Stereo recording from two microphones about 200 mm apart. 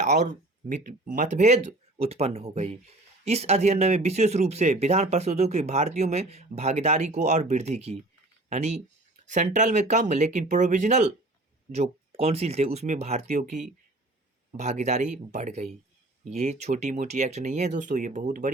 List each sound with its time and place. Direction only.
0.0 s speech: 35° right (ahead or behind)